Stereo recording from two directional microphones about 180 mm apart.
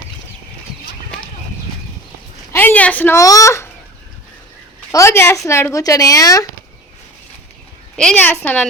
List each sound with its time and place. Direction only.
2.5 s speech: 10° left (ahead or behind)
4.9 s a woman's voice: 15° left (ahead or behind)
7.9 s speech: 10° left (ahead or behind)